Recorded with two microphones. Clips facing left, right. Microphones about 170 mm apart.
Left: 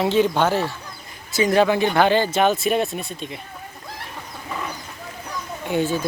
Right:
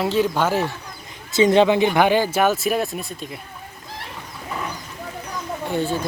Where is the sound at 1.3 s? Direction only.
25° right (ahead or behind); by 3.4 s centre (ahead or behind).